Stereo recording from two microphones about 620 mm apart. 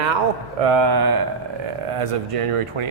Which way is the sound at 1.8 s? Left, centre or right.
Right.